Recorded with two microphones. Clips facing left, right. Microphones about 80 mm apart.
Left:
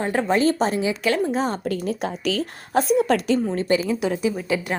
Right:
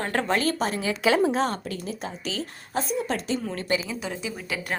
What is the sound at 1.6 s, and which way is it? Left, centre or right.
A woman's voice, left.